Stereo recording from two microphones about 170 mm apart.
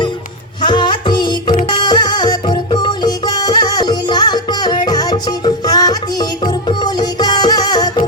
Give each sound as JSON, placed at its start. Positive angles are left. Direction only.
{"t": 0.6, "sound": "music", "side_deg": 25}